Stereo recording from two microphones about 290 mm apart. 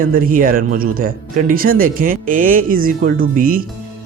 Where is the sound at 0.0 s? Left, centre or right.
Right.